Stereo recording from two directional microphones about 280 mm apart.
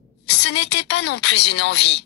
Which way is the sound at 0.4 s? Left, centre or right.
Left.